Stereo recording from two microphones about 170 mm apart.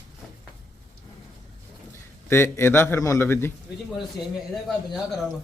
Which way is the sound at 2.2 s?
15° left (ahead or behind).